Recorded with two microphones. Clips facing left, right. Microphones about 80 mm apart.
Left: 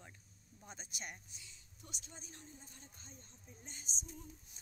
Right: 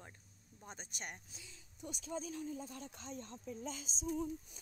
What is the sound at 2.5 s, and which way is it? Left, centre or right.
Speech, right.